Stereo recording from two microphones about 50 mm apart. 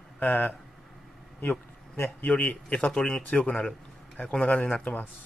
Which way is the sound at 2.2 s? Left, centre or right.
Left.